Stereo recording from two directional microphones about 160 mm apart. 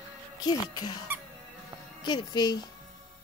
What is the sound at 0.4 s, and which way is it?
Speech, 25° left (ahead or behind).